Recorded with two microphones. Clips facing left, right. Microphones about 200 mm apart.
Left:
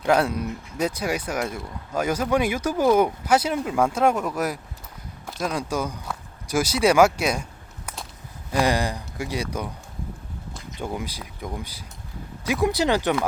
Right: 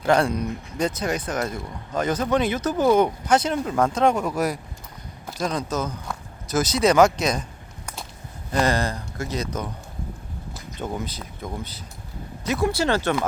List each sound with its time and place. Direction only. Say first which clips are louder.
0.1 s speech: right 1 dB; 5° left (ahead or behind)
8.5 s speech: even; 15° left (ahead or behind)
10.7 s speech: right 1 dB; 10° left (ahead or behind)